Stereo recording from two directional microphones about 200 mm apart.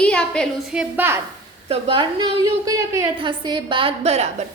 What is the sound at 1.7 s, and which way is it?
A woman's voice, 25° right (ahead or behind).